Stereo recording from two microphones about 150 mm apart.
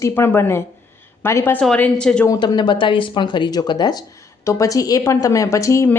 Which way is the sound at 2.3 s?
30° left (ahead or behind).